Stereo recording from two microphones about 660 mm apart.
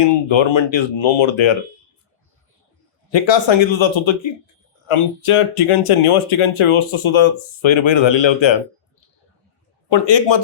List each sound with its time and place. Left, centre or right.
0.0 s speech: left
3.1 s a man's voice: left
9.9 s a man's voice: left